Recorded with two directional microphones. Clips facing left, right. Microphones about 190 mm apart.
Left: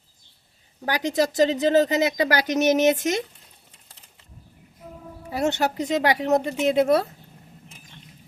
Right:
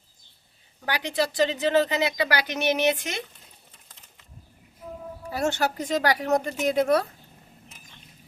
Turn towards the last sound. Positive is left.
turn(degrees=25)  # may be behind; listen again after turning